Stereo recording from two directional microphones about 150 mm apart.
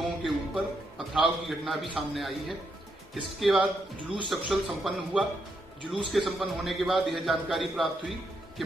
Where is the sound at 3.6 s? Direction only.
35° right (ahead or behind).